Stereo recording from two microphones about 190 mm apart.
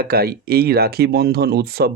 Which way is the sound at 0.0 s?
55° right (ahead or behind).